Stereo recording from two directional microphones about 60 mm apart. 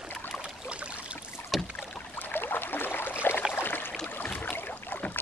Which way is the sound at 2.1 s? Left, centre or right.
Left.